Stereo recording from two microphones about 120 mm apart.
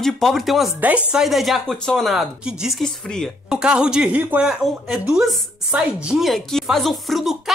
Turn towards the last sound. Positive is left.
turn(degrees=0)  # may be behind; listen again after turning